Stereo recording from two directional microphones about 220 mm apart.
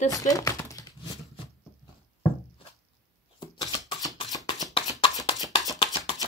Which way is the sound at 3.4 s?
20° left (ahead or behind).